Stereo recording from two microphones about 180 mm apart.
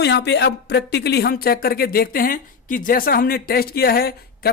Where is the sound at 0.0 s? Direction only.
70° left (ahead or behind).